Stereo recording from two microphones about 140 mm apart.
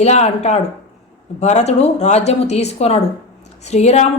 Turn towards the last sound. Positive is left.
turn(degrees=50)  # may be behind; listen again after turning